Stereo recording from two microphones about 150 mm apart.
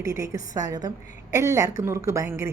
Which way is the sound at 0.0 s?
20° right (ahead or behind).